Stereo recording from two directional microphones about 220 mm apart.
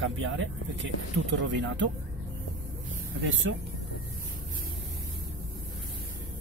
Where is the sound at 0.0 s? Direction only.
60° right (ahead or behind).